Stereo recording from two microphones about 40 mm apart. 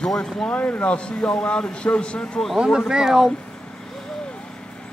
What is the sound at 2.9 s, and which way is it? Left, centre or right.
Speech, centre.